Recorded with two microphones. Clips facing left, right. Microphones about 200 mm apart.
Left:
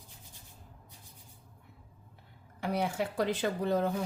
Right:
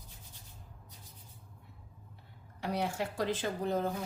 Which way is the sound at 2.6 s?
55° left (ahead or behind).